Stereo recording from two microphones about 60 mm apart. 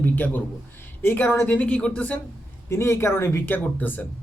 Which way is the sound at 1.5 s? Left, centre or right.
Left.